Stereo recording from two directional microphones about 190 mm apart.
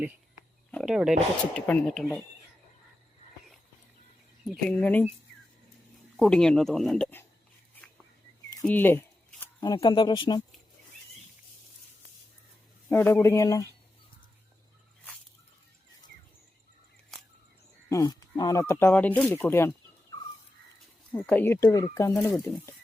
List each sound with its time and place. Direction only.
0.7 s speech: centre (ahead or behind)
4.4 s speech: 5° left (ahead or behind)
6.1 s speech: centre (ahead or behind)
8.6 s speech: 10° left (ahead or behind)
12.9 s speech: 10° left (ahead or behind)
17.8 s speech: 20° left (ahead or behind)
21.1 s speech: 10° left (ahead or behind)